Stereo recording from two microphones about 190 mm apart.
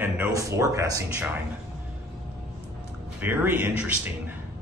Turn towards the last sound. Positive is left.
turn(degrees=-10)  # may be behind; listen again after turning